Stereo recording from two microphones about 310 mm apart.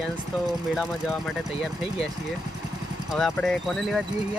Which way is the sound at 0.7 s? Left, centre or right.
Centre.